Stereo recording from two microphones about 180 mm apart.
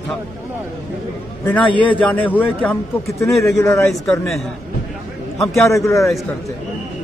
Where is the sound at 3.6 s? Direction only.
20° left (ahead or behind).